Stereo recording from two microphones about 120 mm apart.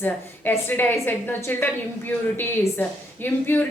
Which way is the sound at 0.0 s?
15° left (ahead or behind).